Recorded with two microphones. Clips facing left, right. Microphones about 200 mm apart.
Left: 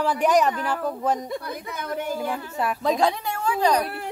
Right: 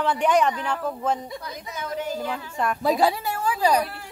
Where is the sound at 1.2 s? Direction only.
55° left (ahead or behind).